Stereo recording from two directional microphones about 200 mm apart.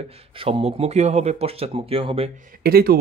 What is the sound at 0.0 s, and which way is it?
Speech, 30° right (ahead or behind).